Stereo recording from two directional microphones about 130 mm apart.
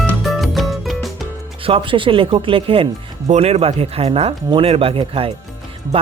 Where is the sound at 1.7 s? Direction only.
40° right (ahead or behind).